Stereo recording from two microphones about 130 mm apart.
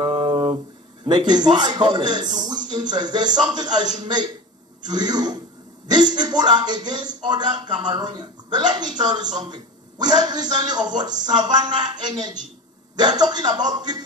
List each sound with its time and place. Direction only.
0.2 s a sound: 35° right (ahead or behind)
1.0 s speech: 35° right (ahead or behind)
2.2 s speech: 70° right (ahead or behind)
2.7 s speech: 35° right (ahead or behind)